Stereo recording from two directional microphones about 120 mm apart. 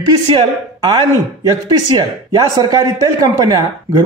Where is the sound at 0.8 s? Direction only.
35° right (ahead or behind).